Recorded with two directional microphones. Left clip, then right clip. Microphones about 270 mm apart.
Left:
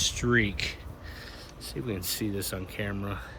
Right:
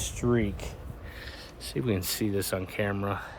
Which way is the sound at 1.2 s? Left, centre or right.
Right.